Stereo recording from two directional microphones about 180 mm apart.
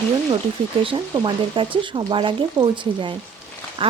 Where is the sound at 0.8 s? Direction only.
30° right (ahead or behind).